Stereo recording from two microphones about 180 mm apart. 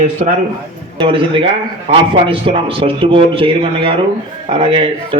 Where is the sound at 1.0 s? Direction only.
30° right (ahead or behind).